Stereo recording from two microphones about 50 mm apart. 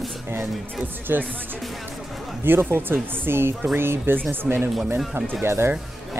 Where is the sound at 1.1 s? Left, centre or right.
Right.